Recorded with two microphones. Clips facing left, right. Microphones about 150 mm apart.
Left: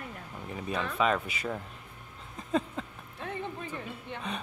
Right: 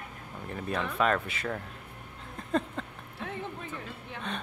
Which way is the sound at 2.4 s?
Centre (ahead or behind).